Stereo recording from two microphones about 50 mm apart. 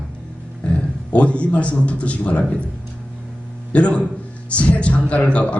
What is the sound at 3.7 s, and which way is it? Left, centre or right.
A man's voice, left.